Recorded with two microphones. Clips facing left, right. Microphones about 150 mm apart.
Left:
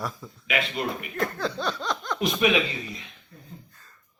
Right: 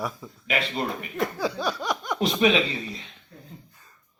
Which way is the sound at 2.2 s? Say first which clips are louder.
Right 2 dB; 30° right (ahead or behind).